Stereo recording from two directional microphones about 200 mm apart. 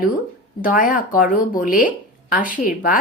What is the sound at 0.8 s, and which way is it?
A woman's voice, 45° left (ahead or behind).